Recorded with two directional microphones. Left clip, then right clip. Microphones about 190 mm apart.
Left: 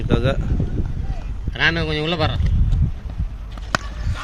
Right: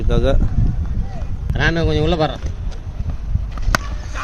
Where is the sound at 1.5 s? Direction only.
55° right (ahead or behind).